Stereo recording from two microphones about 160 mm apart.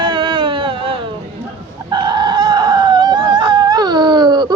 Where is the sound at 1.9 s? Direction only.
25° right (ahead or behind).